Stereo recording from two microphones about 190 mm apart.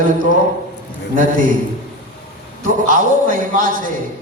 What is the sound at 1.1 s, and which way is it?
Speech, 45° right (ahead or behind).